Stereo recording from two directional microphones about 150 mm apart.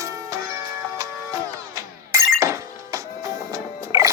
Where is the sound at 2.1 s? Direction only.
20° right (ahead or behind).